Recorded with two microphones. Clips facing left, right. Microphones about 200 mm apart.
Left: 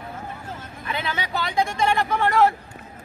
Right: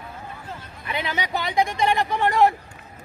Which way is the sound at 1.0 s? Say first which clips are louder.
Right 1 dB; 15° right (ahead or behind).